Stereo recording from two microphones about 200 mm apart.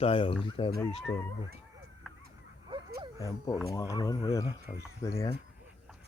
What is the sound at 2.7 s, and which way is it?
Dog, 25° right (ahead or behind).